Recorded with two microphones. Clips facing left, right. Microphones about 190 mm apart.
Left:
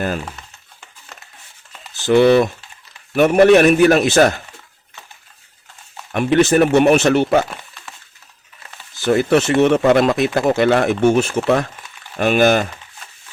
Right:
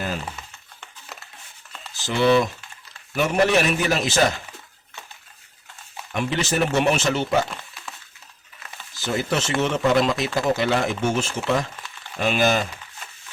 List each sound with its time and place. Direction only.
2.0 s speech: 60° left (ahead or behind)
6.1 s speech: 60° left (ahead or behind)
9.0 s speech: 60° left (ahead or behind)